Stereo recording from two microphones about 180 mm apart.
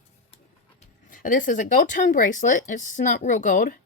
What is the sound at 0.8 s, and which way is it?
Speech, 50° left (ahead or behind).